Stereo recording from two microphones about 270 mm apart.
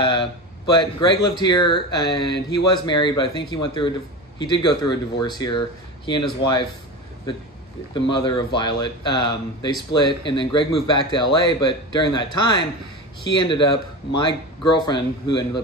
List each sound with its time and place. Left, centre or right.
0.0 s speech: centre
7.9 s speech: centre